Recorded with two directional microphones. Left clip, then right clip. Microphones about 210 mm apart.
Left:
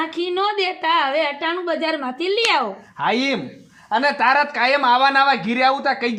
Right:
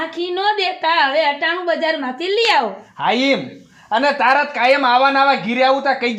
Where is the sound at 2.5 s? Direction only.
15° left (ahead or behind).